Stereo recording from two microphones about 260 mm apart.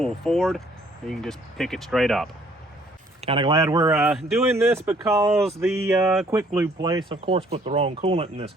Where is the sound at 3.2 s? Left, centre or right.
Centre.